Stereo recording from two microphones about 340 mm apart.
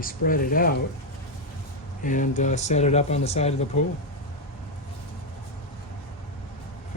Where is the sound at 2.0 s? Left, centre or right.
Left.